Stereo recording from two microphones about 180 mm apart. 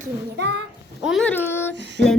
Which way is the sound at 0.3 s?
70° right (ahead or behind).